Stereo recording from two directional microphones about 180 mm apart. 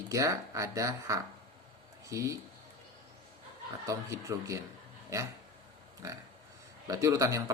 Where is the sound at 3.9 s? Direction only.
15° right (ahead or behind).